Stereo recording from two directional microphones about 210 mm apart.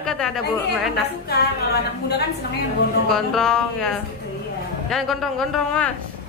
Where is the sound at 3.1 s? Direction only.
Centre (ahead or behind).